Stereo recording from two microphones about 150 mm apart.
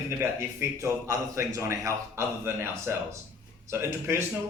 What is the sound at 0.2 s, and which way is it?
A man's voice, 20° right (ahead or behind).